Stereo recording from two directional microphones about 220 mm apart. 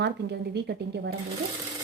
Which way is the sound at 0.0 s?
50° right (ahead or behind).